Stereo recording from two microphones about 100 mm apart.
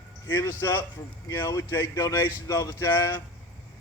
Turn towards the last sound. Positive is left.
turn(degrees=25)  # may be behind; listen again after turning